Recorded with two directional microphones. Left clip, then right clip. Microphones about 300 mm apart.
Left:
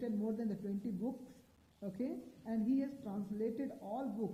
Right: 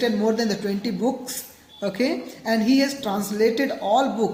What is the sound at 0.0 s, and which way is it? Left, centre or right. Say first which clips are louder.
Speech: right 19 dB; centre.